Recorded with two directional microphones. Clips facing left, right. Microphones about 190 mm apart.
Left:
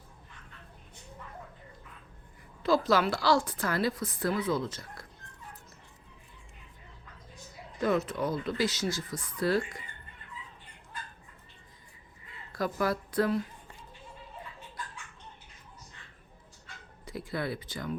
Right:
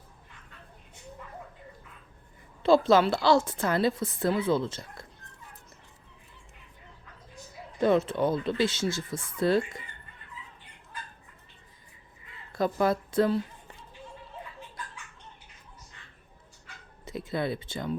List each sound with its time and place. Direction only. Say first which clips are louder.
2.6 s a woman's voice: right 5 dB; 25° right (ahead or behind)
7.8 s a woman's voice: right 5 dB; 30° right (ahead or behind)
12.5 s a woman's voice: right 4 dB; 25° right (ahead or behind)
17.1 s speech: right 4 dB; 25° right (ahead or behind)